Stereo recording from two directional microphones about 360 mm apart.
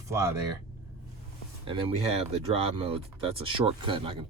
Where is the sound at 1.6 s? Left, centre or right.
Centre.